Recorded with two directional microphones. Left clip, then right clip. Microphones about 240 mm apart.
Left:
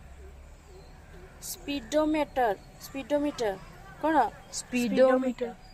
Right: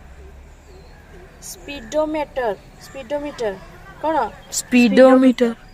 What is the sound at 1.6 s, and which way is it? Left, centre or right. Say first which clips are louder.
Speech: right 6 dB; left.